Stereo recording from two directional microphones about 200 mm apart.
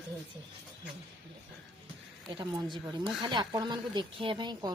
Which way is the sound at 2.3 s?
20° right (ahead or behind).